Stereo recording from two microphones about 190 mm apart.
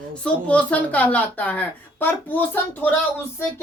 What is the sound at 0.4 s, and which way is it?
A woman's voice, 5° left (ahead or behind).